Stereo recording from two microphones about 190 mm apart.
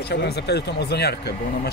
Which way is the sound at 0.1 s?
60° left (ahead or behind).